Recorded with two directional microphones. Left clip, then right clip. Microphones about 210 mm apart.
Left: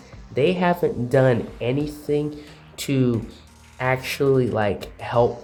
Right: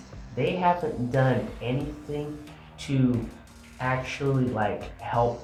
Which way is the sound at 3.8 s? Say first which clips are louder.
Left 6 dB; 55° left (ahead or behind).